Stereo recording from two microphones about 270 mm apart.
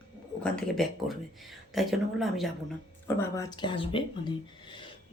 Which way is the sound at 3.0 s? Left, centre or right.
Centre.